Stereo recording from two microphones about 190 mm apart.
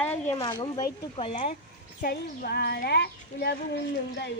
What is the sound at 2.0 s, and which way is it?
Speech, 60° left (ahead or behind).